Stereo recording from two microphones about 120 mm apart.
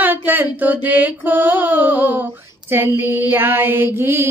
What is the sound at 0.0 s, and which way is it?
Female singing, 15° right (ahead or behind).